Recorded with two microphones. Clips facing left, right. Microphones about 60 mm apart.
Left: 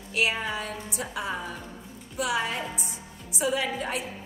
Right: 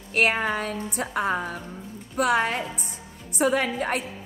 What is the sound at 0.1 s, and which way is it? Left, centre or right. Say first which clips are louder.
A woman's voice: right 5 dB; right.